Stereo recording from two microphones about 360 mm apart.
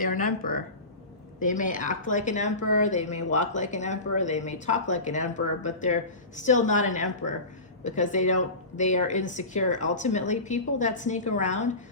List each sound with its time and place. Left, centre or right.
0.0 s speech: left